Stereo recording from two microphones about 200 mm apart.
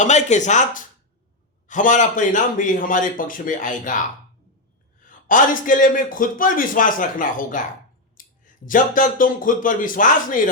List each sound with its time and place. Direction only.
0.0 s a man's voice: 35° left (ahead or behind)
5.0 s a man's voice: 40° left (ahead or behind)